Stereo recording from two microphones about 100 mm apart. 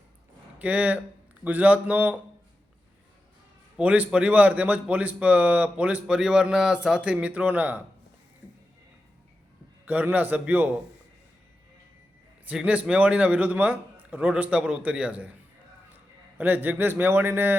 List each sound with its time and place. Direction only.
0.6 s speech: 15° right (ahead or behind)
3.8 s speech: 15° right (ahead or behind)
9.8 s speech: 15° right (ahead or behind)
12.5 s speech: 15° right (ahead or behind)
16.4 s a man's voice: 20° right (ahead or behind)